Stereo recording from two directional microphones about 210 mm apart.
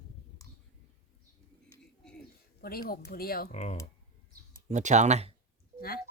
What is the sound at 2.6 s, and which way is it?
Speech, 45° left (ahead or behind).